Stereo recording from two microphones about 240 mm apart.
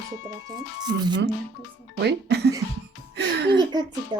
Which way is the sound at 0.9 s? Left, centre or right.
Right.